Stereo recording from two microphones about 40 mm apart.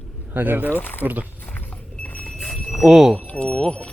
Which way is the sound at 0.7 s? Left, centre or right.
Left.